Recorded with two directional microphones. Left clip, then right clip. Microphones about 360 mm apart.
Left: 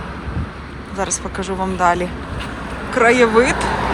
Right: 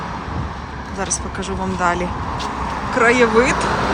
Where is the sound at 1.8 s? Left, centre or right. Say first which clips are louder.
Left 3 dB; centre.